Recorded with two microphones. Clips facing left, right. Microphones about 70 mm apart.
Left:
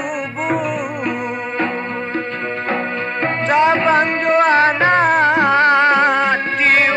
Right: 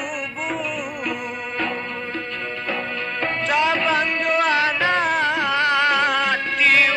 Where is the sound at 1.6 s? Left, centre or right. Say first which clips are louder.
Left 4 dB; left.